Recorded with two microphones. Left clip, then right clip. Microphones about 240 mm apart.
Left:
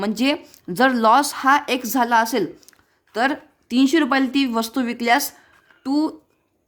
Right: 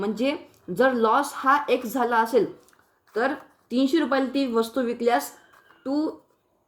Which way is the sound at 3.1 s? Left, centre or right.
Left.